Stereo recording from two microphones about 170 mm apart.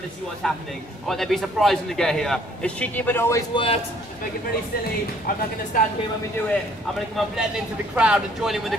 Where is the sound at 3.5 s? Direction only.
30° left (ahead or behind).